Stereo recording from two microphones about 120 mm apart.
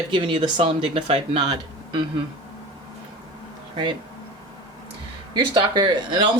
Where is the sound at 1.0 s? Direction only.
55° right (ahead or behind).